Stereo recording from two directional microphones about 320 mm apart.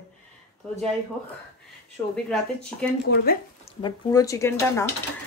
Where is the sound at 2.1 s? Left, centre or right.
Centre.